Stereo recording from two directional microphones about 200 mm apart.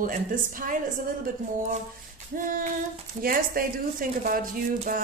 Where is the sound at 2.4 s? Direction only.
40° right (ahead or behind).